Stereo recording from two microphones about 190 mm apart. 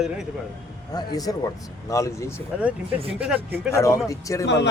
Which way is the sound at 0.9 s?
20° left (ahead or behind).